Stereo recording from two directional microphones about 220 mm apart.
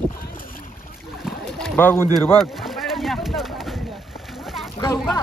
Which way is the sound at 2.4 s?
Centre (ahead or behind).